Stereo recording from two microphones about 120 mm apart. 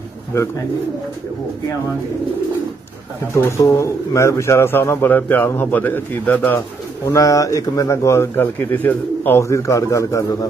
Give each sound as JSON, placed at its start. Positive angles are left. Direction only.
{"t": 3.3, "sound": "a man's voice", "side_deg": 20}
{"t": 7.1, "sound": "a man's voice", "side_deg": 30}